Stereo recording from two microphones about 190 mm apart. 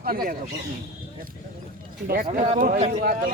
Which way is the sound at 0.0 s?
50° right (ahead or behind).